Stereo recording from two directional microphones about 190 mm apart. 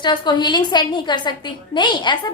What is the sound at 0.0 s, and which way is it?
A woman's voice, 25° left (ahead or behind).